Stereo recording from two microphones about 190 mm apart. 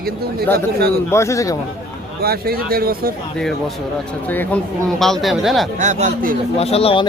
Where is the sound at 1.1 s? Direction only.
15° left (ahead or behind).